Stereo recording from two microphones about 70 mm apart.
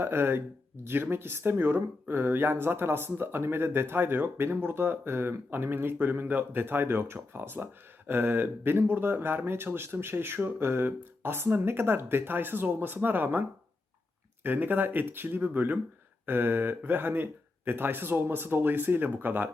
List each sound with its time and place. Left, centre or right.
0.0 s speech: right
14.4 s speech: right